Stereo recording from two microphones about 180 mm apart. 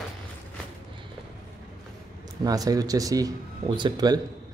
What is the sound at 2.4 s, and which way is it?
Speech, 20° right (ahead or behind).